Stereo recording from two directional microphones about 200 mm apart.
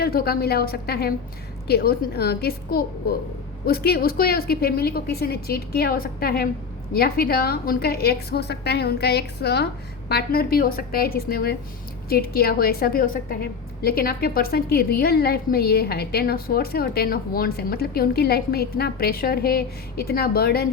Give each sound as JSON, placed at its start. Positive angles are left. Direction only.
{"t": 0.0, "sound": "a woman's voice", "side_deg": 50}